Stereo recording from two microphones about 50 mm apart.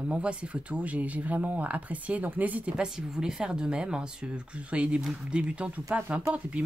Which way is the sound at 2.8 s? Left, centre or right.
Centre.